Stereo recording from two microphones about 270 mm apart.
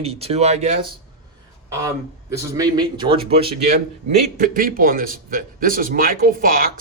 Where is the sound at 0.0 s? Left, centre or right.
Right.